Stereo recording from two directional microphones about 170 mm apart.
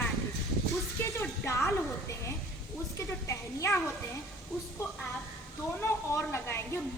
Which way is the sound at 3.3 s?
15° left (ahead or behind).